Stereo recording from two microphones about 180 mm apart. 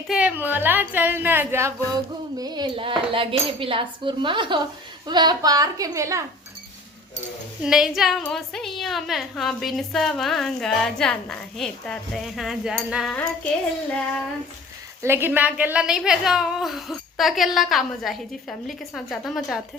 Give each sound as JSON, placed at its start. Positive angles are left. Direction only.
{"t": 0.1, "sound": "a woman's voice", "side_deg": -10}
{"t": 7.6, "sound": "a woman's voice", "side_deg": -5}
{"t": 15.0, "sound": "a woman's voice", "side_deg": -10}